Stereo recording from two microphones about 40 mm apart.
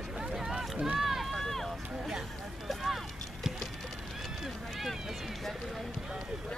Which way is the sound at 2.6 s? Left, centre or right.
Centre.